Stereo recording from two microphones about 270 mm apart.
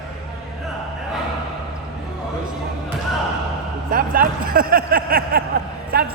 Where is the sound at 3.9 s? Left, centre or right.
Right.